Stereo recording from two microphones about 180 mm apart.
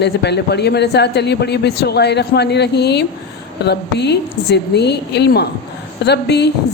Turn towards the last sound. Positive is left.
turn(degrees=70)  # may be behind; listen again after turning